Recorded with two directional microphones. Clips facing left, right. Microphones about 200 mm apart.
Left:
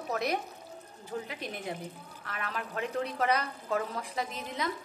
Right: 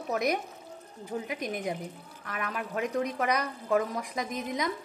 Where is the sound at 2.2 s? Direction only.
15° right (ahead or behind).